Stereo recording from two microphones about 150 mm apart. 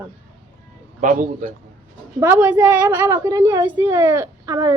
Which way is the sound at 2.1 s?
20° right (ahead or behind).